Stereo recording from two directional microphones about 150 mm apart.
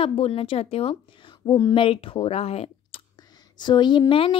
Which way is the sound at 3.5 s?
30° left (ahead or behind).